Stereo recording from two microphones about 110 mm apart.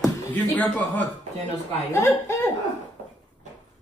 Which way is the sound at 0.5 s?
15° left (ahead or behind).